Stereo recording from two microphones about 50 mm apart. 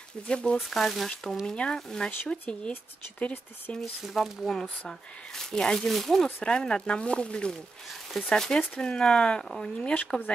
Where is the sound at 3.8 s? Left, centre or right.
Centre.